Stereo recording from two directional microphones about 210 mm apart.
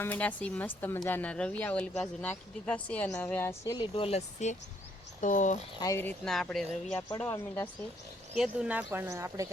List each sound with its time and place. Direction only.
0.0 s speech: 10° left (ahead or behind); by 5.5 s 35° left (ahead or behind)
5.8 s speech: 10° left (ahead or behind)
8.4 s speech: 5° right (ahead or behind)